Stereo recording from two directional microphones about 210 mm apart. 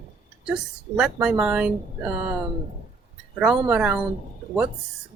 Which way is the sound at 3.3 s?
5° right (ahead or behind).